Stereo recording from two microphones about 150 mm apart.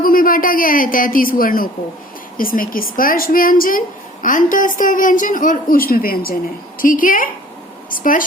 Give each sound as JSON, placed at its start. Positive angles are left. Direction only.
{"t": 0.0, "sound": "a woman's voice", "side_deg": 70}
{"t": 6.7, "sound": "a woman's voice", "side_deg": 65}